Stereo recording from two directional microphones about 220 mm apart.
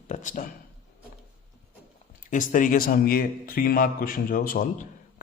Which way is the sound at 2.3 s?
35° left (ahead or behind).